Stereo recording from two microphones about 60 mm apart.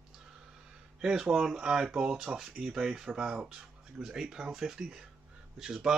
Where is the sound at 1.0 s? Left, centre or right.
Centre.